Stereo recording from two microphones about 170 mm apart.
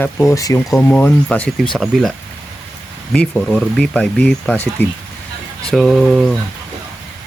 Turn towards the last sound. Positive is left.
turn(degrees=0)  # may be behind; listen again after turning